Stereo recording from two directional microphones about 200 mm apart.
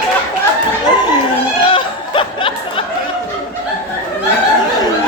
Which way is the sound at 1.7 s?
25° left (ahead or behind).